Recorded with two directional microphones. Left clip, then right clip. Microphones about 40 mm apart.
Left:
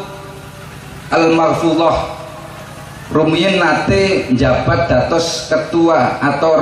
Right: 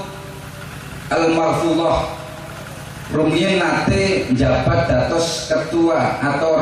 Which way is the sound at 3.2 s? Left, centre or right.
Left.